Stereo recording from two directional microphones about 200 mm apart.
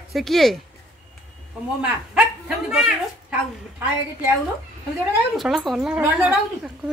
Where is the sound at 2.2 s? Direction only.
5° right (ahead or behind).